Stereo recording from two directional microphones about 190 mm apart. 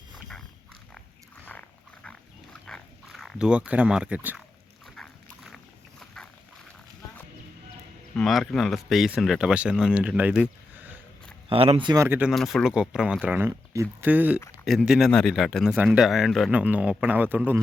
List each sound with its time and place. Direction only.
2.0 s pig: 5° left (ahead or behind)
4.9 s dog: centre (ahead or behind)
6.2 s a sound: centre (ahead or behind)
8.1 s speech: centre (ahead or behind)
11.4 s speech: 30° right (ahead or behind)
12.0 s speech: 10° right (ahead or behind)
12.3 s speech: centre (ahead or behind)